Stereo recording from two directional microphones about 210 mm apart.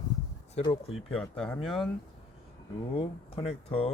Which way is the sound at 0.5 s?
30° left (ahead or behind).